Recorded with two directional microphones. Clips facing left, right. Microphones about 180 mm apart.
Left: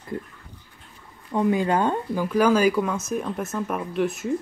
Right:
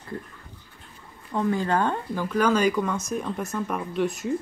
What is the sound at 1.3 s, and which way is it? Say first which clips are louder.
Speech: left 3 dB; 15° left (ahead or behind).